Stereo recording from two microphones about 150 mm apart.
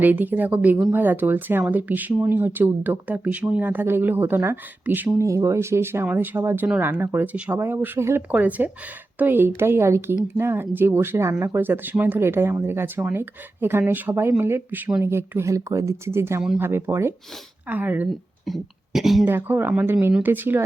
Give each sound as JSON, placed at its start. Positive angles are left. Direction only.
{"t": 0.0, "sound": "speech", "side_deg": -10}
{"t": 18.4, "sound": "speech", "side_deg": 0}
{"t": 19.3, "sound": "speech", "side_deg": -15}